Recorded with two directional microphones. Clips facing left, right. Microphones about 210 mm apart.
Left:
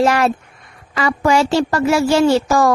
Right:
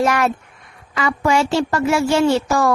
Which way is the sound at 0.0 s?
30° left (ahead or behind).